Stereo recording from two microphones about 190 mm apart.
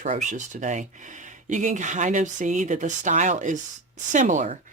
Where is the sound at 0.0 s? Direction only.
40° right (ahead or behind).